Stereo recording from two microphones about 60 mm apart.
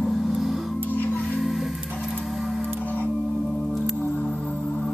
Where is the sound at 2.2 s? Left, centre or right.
Centre.